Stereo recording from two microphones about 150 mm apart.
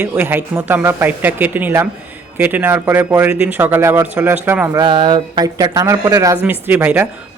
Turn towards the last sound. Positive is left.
turn(degrees=-15)  # may be behind; listen again after turning